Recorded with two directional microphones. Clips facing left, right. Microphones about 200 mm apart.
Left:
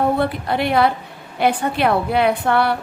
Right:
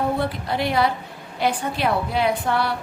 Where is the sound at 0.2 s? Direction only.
60° left (ahead or behind).